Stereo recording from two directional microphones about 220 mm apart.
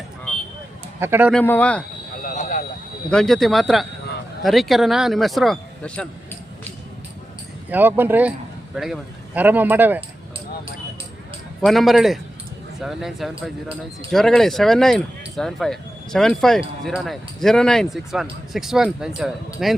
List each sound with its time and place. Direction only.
0.9 s speech: 10° right (ahead or behind)
1.3 s speech: 5° left (ahead or behind)
2.2 s vehicle: 35° left (ahead or behind)
3.1 s speech: centre (ahead or behind)
7.7 s speech: 10° right (ahead or behind)
11.6 s speech: centre (ahead or behind)